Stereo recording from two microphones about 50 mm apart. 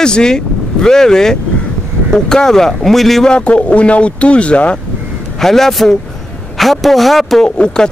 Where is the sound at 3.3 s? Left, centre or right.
Left.